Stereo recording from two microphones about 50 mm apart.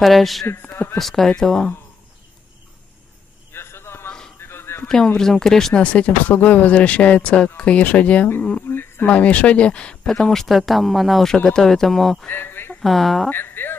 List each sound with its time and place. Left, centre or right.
0.0 s speech: centre
3.5 s a sound: left
4.8 s speech: centre
5.8 s speech: left
8.6 s insect: left
9.0 s speech: left
10.3 s speech: centre
11.4 s speech: centre
12.3 s a sound: left
12.8 s speech: centre
13.3 s music: left